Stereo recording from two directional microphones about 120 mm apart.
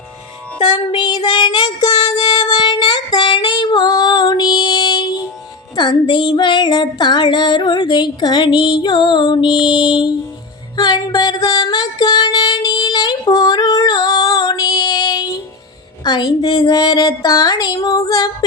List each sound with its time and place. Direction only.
0.9 s child singing: 40° left (ahead or behind)
5.7 s female singing: 40° left (ahead or behind)
10.8 s music: 35° left (ahead or behind)
16.0 s female singing: 35° left (ahead or behind)
17.8 s child singing: 30° left (ahead or behind)